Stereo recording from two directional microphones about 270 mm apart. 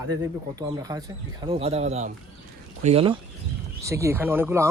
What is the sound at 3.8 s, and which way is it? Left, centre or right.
Speech, centre.